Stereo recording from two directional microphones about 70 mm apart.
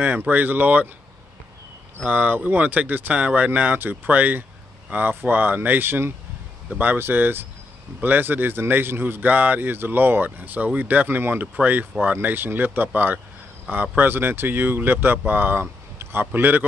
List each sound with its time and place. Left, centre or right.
0.2 s a man's voice: right
2.0 s a man's voice: right